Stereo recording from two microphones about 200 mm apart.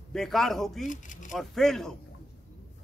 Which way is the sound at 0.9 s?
40° left (ahead or behind).